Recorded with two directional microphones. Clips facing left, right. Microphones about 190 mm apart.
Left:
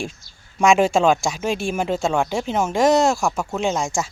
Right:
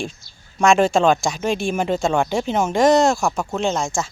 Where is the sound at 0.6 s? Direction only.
10° left (ahead or behind).